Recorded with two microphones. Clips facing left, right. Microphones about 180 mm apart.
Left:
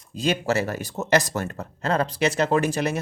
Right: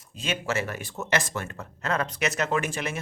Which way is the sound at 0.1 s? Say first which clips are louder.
Left 6 dB; 35° left (ahead or behind).